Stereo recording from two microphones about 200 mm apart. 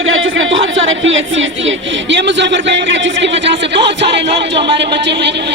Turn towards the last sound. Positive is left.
turn(degrees=-60)  # may be behind; listen again after turning